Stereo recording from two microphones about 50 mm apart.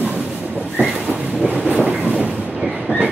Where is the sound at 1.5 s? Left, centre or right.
Right.